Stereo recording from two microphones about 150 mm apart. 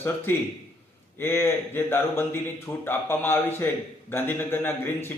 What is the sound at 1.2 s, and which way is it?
A man's voice, 15° left (ahead or behind).